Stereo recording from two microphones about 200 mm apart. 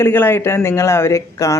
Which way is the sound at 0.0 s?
10° left (ahead or behind).